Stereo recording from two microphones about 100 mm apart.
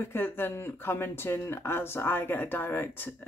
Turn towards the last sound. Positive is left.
turn(degrees=20)  # may be behind; listen again after turning